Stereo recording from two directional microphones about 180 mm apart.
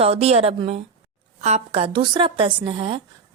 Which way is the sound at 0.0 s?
35° right (ahead or behind).